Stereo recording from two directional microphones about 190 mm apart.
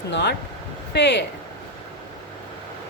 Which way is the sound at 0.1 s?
65° left (ahead or behind).